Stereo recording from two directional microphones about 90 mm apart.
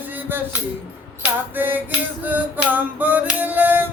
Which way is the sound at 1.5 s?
20° right (ahead or behind).